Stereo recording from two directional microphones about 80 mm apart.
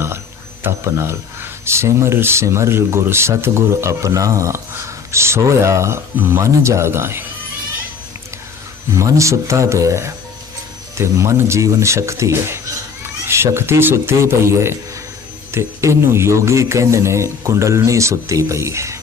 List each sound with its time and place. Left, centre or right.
0.6 s speech: right
8.9 s speech: right